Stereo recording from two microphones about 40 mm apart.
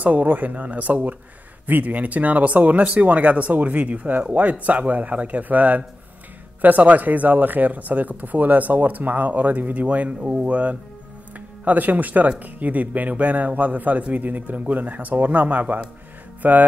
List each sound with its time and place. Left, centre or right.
0.0 s speech: right
16.4 s speech: right